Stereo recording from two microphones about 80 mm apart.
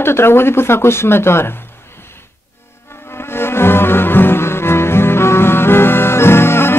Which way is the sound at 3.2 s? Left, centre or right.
Left.